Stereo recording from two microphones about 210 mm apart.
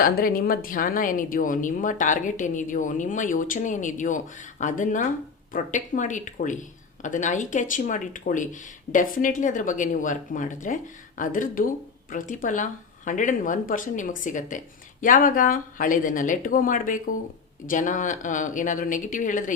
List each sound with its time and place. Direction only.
0.0 s speech: 45° left (ahead or behind)